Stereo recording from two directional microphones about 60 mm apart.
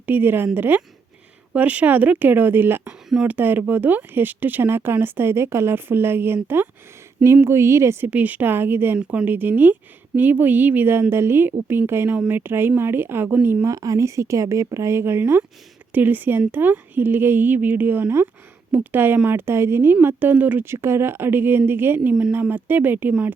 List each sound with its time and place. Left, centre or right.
0.0 s speech: right
7.4 s speech: right
8.0 s speech: right
13.7 s speech: right
20.8 s speech: right